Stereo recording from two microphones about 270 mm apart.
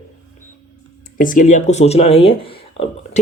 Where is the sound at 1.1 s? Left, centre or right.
Left.